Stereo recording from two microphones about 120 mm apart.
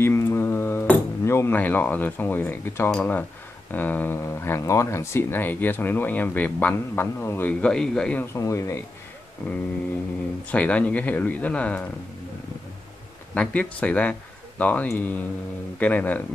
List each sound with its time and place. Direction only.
0.0 s a sound: 20° left (ahead or behind)
3.0 s speech: 15° left (ahead or behind)
7.6 s speech: 5° left (ahead or behind)
8.2 s speech: 25° left (ahead or behind)
10.5 s speech: 10° left (ahead or behind)
13.3 s speech: 10° left (ahead or behind)